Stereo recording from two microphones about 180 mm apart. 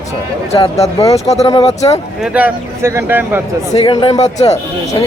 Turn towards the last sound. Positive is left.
turn(degrees=35)  # may be behind; listen again after turning